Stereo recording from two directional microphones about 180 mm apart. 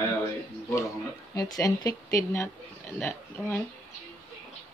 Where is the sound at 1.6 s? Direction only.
20° left (ahead or behind).